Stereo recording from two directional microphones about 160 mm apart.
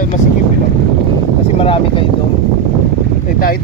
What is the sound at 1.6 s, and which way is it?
Speech, 35° left (ahead or behind).